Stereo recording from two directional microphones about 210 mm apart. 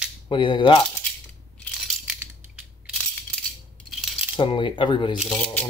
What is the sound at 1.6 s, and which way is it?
Coin, 5° right (ahead or behind).